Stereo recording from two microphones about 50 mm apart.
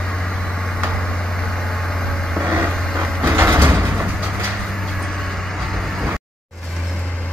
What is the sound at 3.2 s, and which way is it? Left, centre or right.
Sliding door, right.